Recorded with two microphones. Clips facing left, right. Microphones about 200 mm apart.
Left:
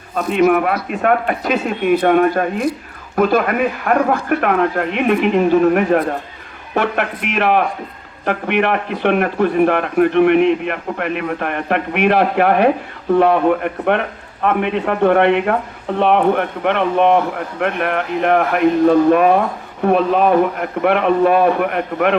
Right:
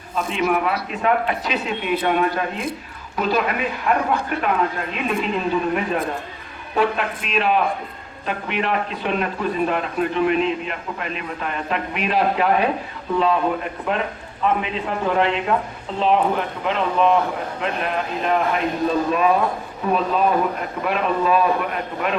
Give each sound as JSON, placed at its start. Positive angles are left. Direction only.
{"t": 0.2, "sound": "a man's voice", "side_deg": 55}